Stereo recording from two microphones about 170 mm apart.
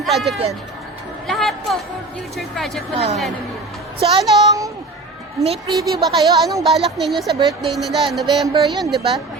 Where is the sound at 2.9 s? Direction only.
40° right (ahead or behind).